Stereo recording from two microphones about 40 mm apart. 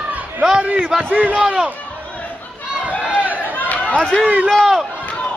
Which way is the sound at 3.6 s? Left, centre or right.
Left.